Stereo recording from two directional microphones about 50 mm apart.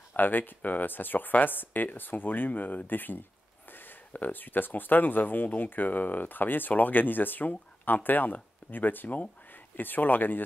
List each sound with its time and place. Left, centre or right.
0.1 s speech: left